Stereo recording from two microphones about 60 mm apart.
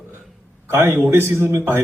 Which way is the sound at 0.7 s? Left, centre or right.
Right.